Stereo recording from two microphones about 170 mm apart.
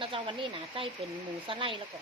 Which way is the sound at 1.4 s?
30° right (ahead or behind).